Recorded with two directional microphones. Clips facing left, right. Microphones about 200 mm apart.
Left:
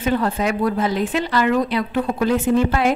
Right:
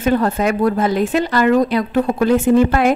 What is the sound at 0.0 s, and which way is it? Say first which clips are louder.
Speech: right 4 dB; 45° right (ahead or behind).